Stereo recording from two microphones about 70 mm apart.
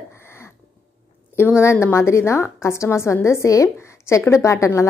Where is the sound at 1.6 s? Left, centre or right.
Left.